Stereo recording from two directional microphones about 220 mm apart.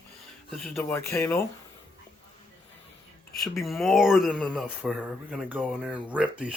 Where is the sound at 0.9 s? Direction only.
10° left (ahead or behind).